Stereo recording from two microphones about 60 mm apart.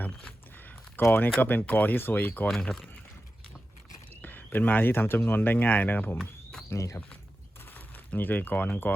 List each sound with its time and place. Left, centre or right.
1.0 s speech: left
4.2 s speech: left
6.1 s a sound: centre
6.7 s speech: left
7.7 s speech: left